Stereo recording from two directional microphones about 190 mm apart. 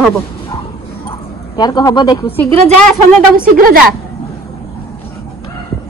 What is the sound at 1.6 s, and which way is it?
Speech, 20° left (ahead or behind).